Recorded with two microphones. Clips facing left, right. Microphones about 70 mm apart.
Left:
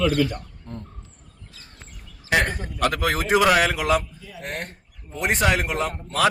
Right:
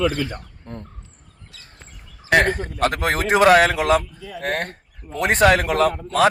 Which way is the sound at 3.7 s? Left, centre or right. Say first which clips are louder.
Right 4 dB; right.